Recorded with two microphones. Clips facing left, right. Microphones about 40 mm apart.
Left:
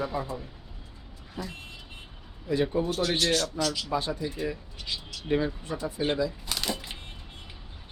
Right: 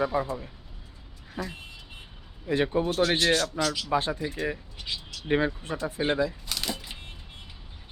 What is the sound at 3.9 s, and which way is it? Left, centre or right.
Speech, right.